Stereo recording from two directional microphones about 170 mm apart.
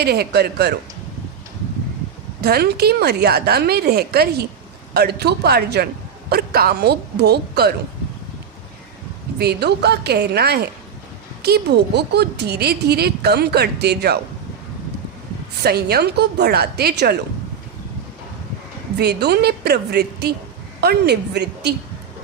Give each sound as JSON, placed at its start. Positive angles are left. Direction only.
{"t": 0.0, "sound": "a woman's voice", "side_deg": -70}
{"t": 2.4, "sound": "a woman's voice", "side_deg": -70}
{"t": 9.4, "sound": "a woman's voice", "side_deg": -75}
{"t": 15.6, "sound": "a woman's voice", "side_deg": -70}
{"t": 18.9, "sound": "a woman's voice", "side_deg": -70}